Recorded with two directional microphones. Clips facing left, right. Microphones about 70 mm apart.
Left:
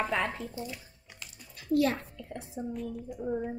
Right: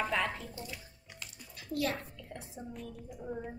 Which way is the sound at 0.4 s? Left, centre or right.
Left.